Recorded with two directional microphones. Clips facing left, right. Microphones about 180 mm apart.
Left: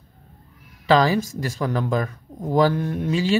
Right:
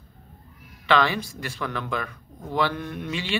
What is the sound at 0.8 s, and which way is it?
Speech, 40° left (ahead or behind).